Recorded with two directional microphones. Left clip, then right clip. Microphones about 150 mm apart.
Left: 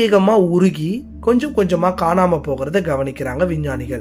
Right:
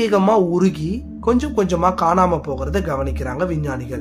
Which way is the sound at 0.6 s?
15° left (ahead or behind).